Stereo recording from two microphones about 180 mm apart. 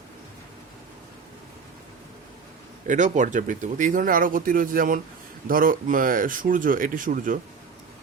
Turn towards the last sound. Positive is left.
turn(degrees=-50)  # may be behind; listen again after turning